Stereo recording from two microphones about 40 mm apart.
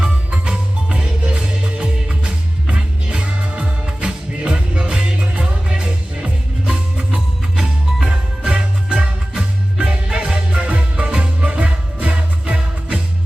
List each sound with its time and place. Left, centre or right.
0.0 s music: right
7.5 s music: centre
8.0 s music: right